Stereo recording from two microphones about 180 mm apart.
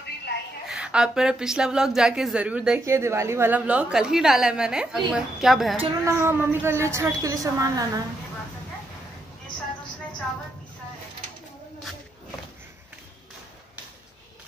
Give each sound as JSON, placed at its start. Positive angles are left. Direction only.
{"t": 0.7, "sound": "a woman's voice", "side_deg": -5}
{"t": 6.0, "sound": "a woman's voice", "side_deg": -15}